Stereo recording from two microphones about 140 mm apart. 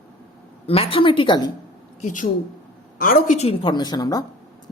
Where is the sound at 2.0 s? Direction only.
65° left (ahead or behind).